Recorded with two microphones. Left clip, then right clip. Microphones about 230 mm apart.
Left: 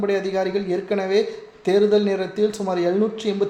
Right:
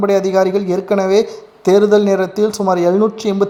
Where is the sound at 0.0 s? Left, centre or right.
Right.